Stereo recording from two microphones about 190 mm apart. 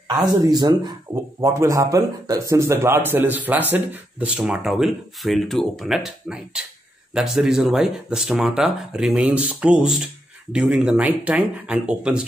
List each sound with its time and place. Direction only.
0.5 s speech: 20° right (ahead or behind); by 12.2 s 5° right (ahead or behind)